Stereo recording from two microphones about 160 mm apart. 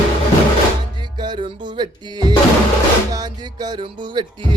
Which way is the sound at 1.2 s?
30° right (ahead or behind).